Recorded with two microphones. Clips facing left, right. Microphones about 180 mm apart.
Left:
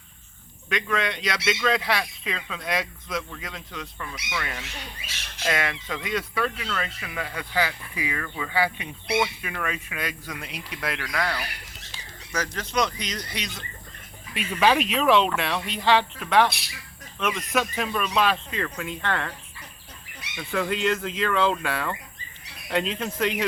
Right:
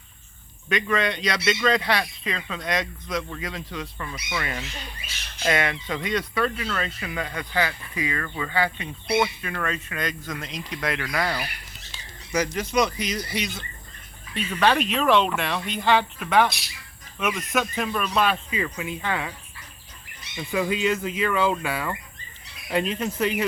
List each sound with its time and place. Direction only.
0.7 s speech: centre (ahead or behind)
14.3 s speech: 5° left (ahead or behind)
20.4 s speech: 10° right (ahead or behind)